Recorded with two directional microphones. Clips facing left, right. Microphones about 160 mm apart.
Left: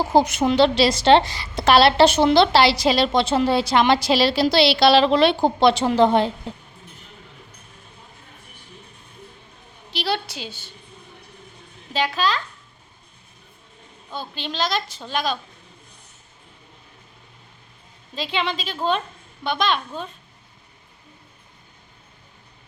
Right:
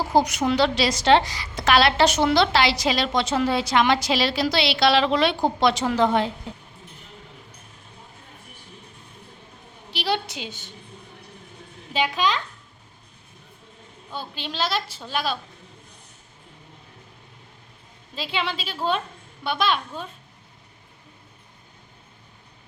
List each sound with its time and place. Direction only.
0.1 s a woman's voice: 25° left (ahead or behind)
9.9 s a woman's voice: 15° right (ahead or behind)
11.9 s a woman's voice: 15° right (ahead or behind)
14.2 s a woman's voice: 10° right (ahead or behind)
18.1 s a woman's voice: 5° right (ahead or behind)